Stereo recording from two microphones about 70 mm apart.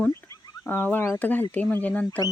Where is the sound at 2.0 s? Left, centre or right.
Left.